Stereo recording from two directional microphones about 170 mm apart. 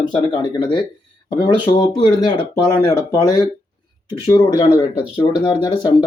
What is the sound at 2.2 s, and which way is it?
Speech, 20° left (ahead or behind).